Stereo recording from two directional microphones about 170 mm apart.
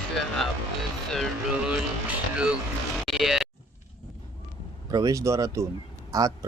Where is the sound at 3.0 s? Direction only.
Centre (ahead or behind).